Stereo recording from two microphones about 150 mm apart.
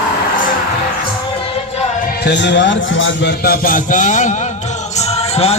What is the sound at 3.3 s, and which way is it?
Music, 90° left.